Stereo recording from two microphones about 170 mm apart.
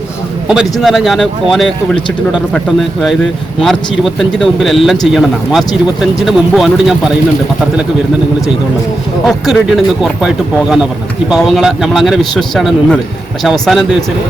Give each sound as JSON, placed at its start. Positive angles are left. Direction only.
{"t": 0.4, "sound": "speech", "side_deg": -5}
{"t": 9.2, "sound": "speech", "side_deg": 0}